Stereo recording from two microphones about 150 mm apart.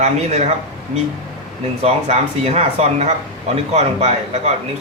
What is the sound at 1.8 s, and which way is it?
Speech, 45° right (ahead or behind).